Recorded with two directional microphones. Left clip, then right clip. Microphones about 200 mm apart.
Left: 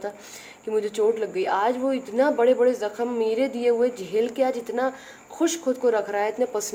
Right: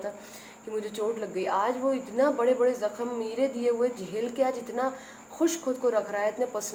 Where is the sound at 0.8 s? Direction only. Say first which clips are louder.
Left 8 dB; 50° left (ahead or behind).